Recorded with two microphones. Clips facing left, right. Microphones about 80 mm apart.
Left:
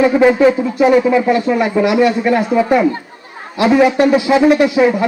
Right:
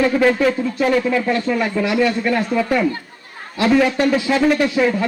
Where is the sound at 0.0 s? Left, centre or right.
Centre.